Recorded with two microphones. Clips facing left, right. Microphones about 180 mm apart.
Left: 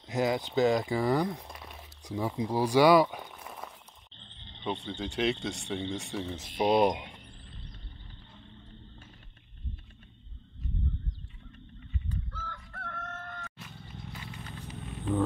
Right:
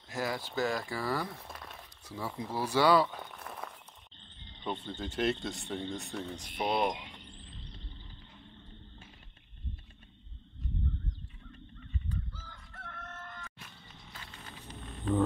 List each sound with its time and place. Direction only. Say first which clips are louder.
0.1 s speech: left 7 dB; 20° left (ahead or behind)
3.3 s a sound: even; 5° left (ahead or behind)
4.8 s speech: left 1 dB; centre (ahead or behind)
6.5 s speech: left 7 dB; 25° left (ahead or behind)
12.3 s chicken: left 7 dB; 65° left (ahead or behind)
14.7 s snake: even; centre (ahead or behind)